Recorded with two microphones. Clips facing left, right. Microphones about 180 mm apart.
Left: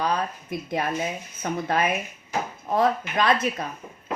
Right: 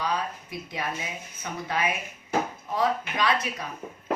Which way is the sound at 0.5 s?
50° left (ahead or behind).